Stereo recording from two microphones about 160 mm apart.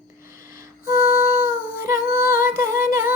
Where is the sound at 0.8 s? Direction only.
60° left (ahead or behind).